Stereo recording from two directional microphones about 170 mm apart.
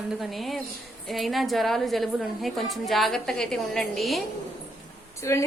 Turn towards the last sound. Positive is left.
turn(degrees=15)  # may be behind; listen again after turning